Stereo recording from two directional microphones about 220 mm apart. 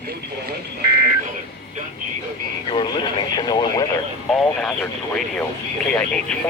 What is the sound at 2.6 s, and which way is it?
Radio, 20° left (ahead or behind).